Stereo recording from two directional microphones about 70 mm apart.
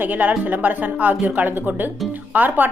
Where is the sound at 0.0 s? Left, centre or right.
Right.